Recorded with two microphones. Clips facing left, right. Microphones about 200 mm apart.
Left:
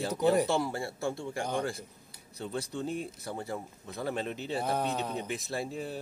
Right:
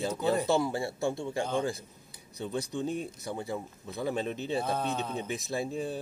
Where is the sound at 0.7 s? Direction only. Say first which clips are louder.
Right 3 dB; 20° right (ahead or behind).